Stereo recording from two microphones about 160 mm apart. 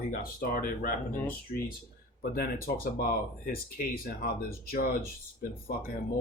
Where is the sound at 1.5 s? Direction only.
55° left (ahead or behind).